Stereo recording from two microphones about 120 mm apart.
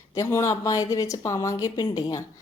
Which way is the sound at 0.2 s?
25° left (ahead or behind).